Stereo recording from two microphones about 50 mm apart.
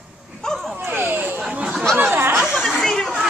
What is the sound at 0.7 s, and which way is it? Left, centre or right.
Speech, right.